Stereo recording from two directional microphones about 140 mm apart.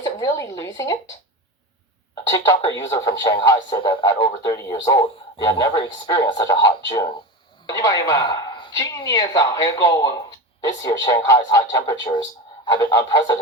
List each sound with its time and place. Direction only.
0.0 s a woman's voice: 25° left (ahead or behind)
2.3 s a man's voice: 25° left (ahead or behind)